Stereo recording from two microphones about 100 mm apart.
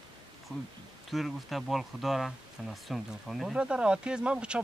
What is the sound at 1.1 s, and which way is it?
Speech, centre (ahead or behind).